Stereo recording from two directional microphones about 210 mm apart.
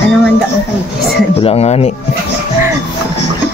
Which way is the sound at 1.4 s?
30° left (ahead or behind).